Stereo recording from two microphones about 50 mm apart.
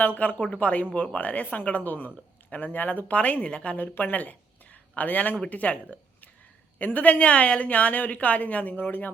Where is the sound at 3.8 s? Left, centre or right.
Left.